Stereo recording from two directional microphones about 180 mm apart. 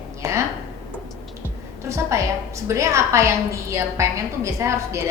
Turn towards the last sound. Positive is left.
turn(degrees=-15)  # may be behind; listen again after turning